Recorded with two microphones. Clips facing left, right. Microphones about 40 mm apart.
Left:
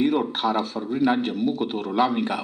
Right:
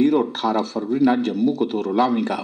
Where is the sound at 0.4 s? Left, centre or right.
Centre.